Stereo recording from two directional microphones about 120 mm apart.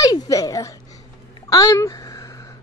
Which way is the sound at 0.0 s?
30° left (ahead or behind).